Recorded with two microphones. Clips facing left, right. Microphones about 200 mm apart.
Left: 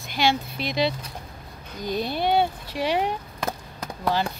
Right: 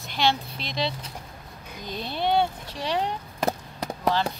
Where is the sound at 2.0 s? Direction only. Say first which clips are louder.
Left 1 dB; 5° left (ahead or behind).